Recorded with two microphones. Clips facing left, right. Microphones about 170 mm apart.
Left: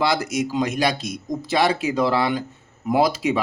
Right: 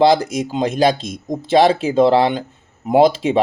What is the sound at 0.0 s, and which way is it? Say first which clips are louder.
Speech: right 7 dB; 30° right (ahead or behind).